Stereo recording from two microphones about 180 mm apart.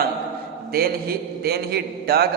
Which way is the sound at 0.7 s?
60° right (ahead or behind).